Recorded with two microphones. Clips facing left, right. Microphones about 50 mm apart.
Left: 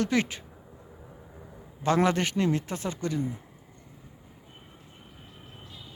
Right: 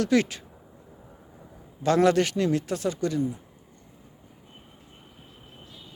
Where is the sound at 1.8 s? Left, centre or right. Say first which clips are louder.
Right 4 dB; left.